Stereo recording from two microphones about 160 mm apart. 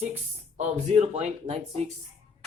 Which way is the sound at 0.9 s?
45° right (ahead or behind).